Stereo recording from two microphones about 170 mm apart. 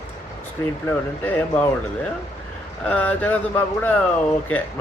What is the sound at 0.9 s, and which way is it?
Speech, 10° left (ahead or behind).